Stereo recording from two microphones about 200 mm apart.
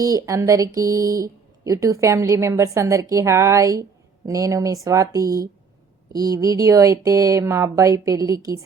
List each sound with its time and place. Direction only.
0.0 s speech: 15° right (ahead or behind)